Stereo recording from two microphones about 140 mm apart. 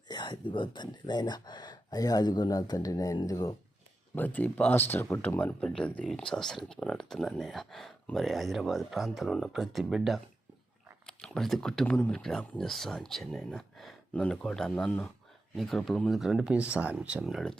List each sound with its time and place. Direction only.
0.1 s speech: 30° left (ahead or behind)
4.1 s speech: 10° left (ahead or behind)